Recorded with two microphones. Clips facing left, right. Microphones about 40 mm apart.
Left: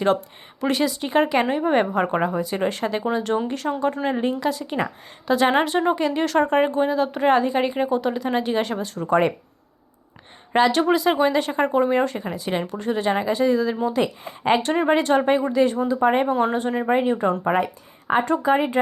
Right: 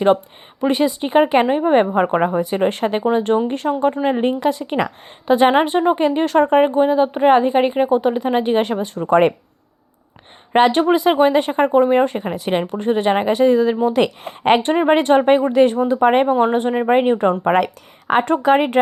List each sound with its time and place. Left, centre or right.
0.6 s speech: centre
4.2 s speech: right
5.5 s speech: centre; by 9.3 s right
10.7 s speech: right
14.6 s speech: right
14.8 s speech: right
16.2 s speech: right
16.9 s speech: right
17.4 s speech: right